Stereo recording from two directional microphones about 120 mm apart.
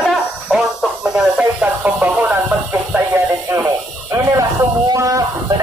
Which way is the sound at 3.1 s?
20° right (ahead or behind).